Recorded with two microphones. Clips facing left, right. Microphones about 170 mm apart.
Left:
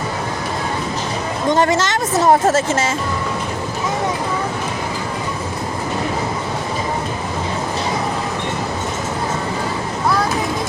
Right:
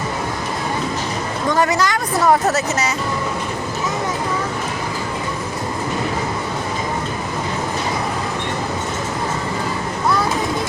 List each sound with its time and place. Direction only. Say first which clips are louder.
1.5 s a woman's voice: left 2 dB; 25° left (ahead or behind)